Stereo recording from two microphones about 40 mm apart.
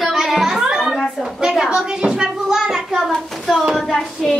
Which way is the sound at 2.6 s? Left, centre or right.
Centre.